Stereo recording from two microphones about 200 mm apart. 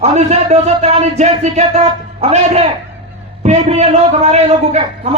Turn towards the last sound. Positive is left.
turn(degrees=-35)  # may be behind; listen again after turning